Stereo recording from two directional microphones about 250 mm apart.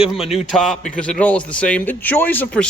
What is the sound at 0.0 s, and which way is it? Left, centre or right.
Speech, centre.